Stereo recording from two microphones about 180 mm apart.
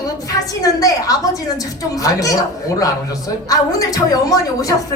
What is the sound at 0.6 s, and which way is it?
A woman's voice, 20° left (ahead or behind).